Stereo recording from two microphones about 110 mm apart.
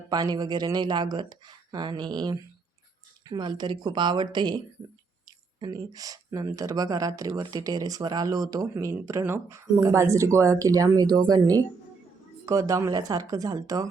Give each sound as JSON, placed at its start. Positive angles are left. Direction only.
{"t": 0.1, "sound": "speech", "side_deg": -35}